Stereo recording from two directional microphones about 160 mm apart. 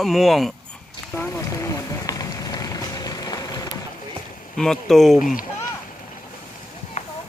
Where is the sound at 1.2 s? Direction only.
20° left (ahead or behind).